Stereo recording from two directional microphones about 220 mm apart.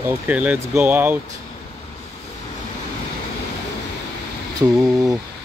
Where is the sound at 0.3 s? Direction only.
5° right (ahead or behind).